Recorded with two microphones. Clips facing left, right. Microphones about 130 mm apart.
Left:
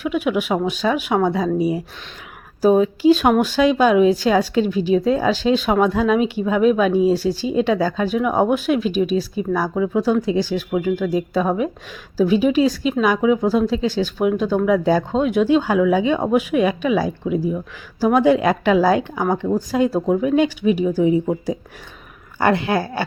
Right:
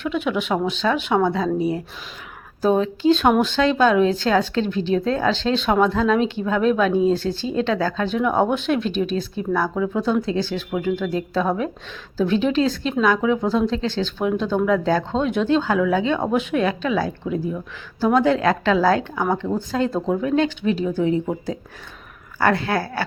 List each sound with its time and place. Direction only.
0.0 s a woman's voice: 10° left (ahead or behind)